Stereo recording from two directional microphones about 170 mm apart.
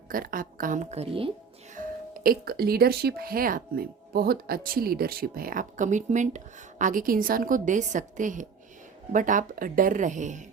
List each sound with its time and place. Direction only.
0.1 s speech: 55° right (ahead or behind); by 1.3 s 35° right (ahead or behind)
1.7 s speech: 55° right (ahead or behind)